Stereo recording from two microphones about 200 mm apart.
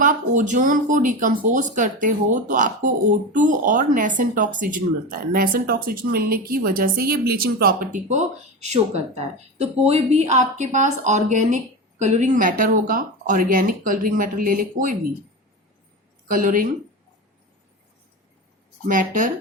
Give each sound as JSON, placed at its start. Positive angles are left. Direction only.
{"t": 0.0, "sound": "speech", "side_deg": -40}
{"t": 16.3, "sound": "speech", "side_deg": -45}
{"t": 18.9, "sound": "speech", "side_deg": -40}